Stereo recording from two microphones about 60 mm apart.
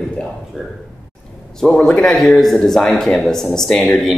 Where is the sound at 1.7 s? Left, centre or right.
Centre.